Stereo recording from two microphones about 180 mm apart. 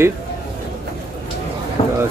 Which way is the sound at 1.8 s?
35° left (ahead or behind).